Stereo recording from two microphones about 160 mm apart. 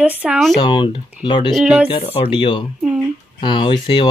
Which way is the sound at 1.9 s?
35° left (ahead or behind).